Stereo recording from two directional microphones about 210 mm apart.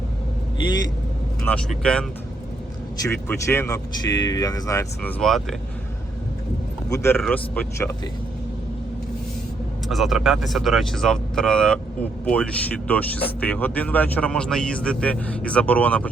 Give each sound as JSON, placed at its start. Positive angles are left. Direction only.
{"t": 1.4, "sound": "speech", "side_deg": 5}
{"t": 5.2, "sound": "speech", "side_deg": 0}
{"t": 6.9, "sound": "speech", "side_deg": 10}
{"t": 9.9, "sound": "speech", "side_deg": 0}